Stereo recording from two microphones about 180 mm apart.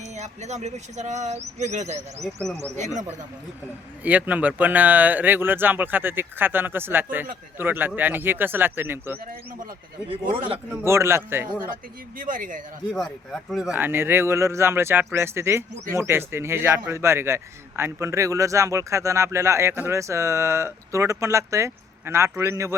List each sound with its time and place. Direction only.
0.0 s speech: 40° right (ahead or behind)
2.2 s speech: centre (ahead or behind)
2.7 s speech: 40° right (ahead or behind)
4.0 s a man's voice: 10° right (ahead or behind)
10.3 s speech: 30° right (ahead or behind)
10.7 s a man's voice: 15° right (ahead or behind)
12.1 s speech: 50° right (ahead or behind)
12.9 s a man's voice: centre (ahead or behind); by 22.7 s 15° right (ahead or behind)